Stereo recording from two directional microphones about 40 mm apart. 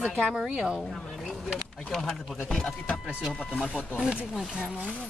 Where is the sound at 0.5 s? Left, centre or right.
Centre.